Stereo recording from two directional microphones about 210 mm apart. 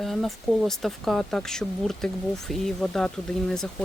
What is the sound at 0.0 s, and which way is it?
Speech, centre (ahead or behind).